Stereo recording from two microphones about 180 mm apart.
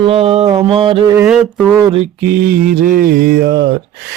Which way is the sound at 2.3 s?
55° right (ahead or behind).